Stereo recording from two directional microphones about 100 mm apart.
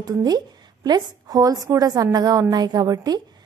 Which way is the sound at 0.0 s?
40° right (ahead or behind).